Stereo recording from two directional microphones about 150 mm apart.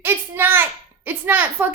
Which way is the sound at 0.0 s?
15° right (ahead or behind).